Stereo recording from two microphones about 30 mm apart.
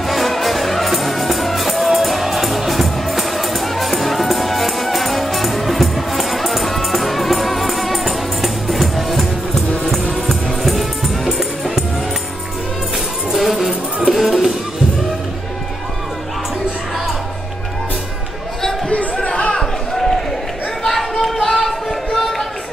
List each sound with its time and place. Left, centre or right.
0.0 s music: centre
13.3 s tambourine: centre
14.1 s music: centre
19.3 s chatter: left
19.9 s a sound: centre
21.2 s a sound: centre